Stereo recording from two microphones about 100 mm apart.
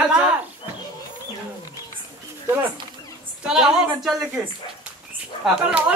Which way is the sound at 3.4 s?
5° right (ahead or behind).